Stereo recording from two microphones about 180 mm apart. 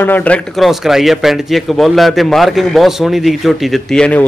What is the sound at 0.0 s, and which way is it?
Speech, 10° left (ahead or behind).